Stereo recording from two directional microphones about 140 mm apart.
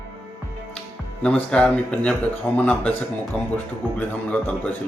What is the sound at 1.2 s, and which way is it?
Speech, 10° left (ahead or behind).